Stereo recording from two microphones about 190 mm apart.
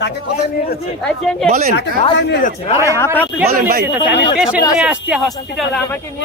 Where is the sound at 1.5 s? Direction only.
50° right (ahead or behind).